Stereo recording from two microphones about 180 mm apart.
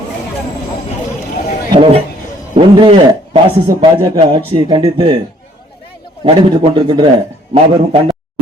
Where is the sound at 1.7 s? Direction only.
30° right (ahead or behind).